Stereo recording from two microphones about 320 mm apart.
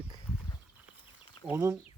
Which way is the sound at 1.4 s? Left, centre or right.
Centre.